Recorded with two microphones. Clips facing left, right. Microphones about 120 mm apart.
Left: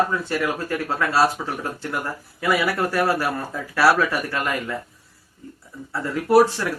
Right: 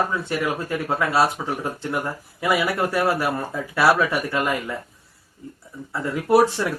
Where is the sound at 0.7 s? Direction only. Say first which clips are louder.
Right 1 dB; 15° right (ahead or behind).